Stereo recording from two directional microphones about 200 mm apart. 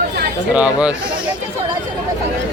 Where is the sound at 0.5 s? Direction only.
5° right (ahead or behind).